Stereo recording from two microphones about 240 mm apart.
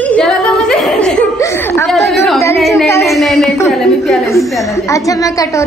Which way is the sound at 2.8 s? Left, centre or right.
Centre.